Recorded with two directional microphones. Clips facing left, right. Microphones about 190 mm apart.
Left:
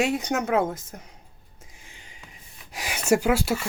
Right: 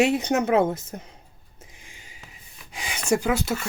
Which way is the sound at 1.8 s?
10° right (ahead or behind).